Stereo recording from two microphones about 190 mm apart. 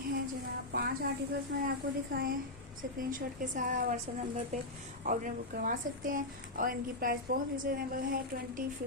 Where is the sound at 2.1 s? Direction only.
50° right (ahead or behind).